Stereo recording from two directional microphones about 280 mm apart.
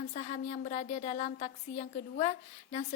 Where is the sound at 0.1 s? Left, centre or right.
Left.